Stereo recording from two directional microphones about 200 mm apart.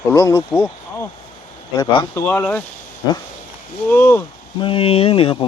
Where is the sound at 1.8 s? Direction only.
15° left (ahead or behind).